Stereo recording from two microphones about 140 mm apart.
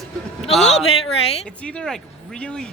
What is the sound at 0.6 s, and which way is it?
Speech, 45° left (ahead or behind).